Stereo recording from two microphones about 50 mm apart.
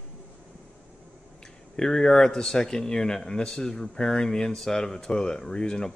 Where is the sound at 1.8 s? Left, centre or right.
Centre.